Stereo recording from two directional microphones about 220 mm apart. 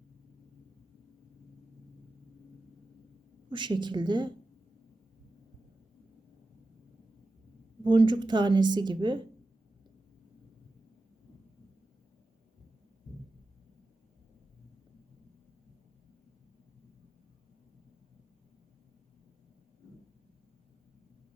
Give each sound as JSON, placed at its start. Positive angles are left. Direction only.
{"t": 3.5, "sound": "speech", "side_deg": -20}
{"t": 7.9, "sound": "speech", "side_deg": -20}